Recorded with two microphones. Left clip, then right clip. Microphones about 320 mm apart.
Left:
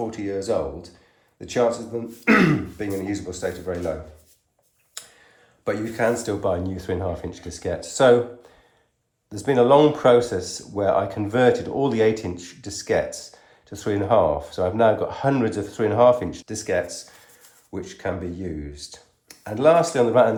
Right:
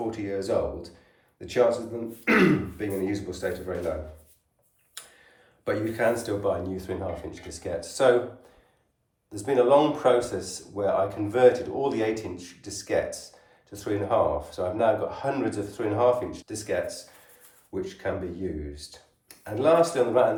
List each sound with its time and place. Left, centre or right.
0.1 s speech: centre
5.6 s speech: centre
9.3 s speech: left